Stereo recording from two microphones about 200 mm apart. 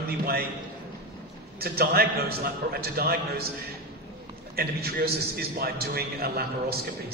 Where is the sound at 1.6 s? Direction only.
50° right (ahead or behind).